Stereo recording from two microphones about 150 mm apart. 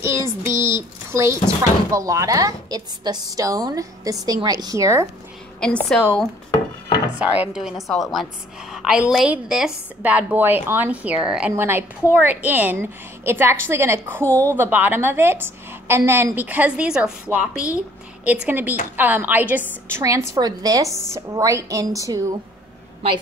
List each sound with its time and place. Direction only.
0.0 s a woman's voice: 15° right (ahead or behind)
5.6 s a woman's voice: 5° left (ahead or behind)
7.2 s a woman's voice: 5° right (ahead or behind)
14.2 s a woman's voice: 10° left (ahead or behind)
14.6 s a woman's voice: 15° right (ahead or behind)